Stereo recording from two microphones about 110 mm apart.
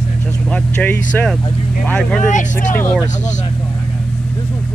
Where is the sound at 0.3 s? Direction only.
10° left (ahead or behind).